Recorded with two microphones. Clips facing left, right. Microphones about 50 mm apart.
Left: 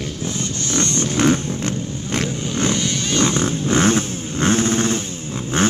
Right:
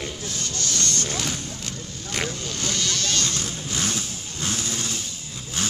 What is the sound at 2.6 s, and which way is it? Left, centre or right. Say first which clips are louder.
Vehicle: left 7 dB; left.